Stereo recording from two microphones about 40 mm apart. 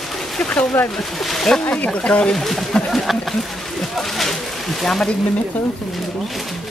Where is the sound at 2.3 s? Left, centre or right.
Centre.